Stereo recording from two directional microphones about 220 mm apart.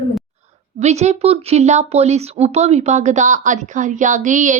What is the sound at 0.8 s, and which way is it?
Speech, 30° right (ahead or behind).